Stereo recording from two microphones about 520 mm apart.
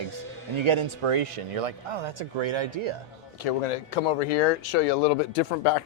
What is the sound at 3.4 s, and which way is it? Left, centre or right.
Speech, left.